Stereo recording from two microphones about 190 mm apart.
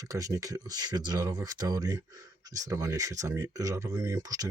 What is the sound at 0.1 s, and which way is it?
Speech, 15° right (ahead or behind).